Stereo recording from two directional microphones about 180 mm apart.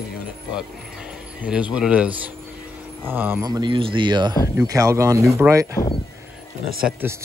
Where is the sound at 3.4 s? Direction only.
20° right (ahead or behind).